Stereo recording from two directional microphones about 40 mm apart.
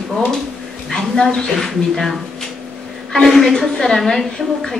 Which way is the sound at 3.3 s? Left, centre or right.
Centre.